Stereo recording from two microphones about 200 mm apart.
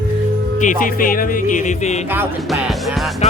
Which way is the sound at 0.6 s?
40° left (ahead or behind).